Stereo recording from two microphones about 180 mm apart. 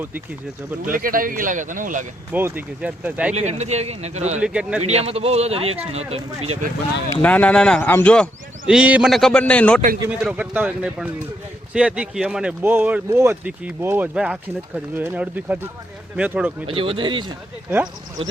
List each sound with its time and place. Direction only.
0.9 s speech: 50° right (ahead or behind)
2.3 s speech: 10° right (ahead or behind)
3.3 s speech: 40° right (ahead or behind)
4.4 s a man's voice: 5° right (ahead or behind)
4.9 s speech: 35° right (ahead or behind)
7.1 s speech: 10° left (ahead or behind)
8.6 s a man's voice: 5° right (ahead or behind)
10.1 s speech: 5° right (ahead or behind)
16.6 s speech: 30° right (ahead or behind)